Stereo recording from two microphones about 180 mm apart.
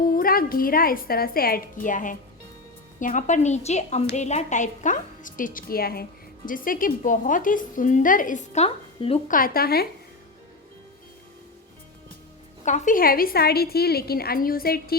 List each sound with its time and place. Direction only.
0.0 s a woman's voice: 55° left (ahead or behind); by 9.2 s 35° left (ahead or behind)
9.2 s a woman's voice: 50° left (ahead or behind)
12.6 s a woman's voice: 45° left (ahead or behind)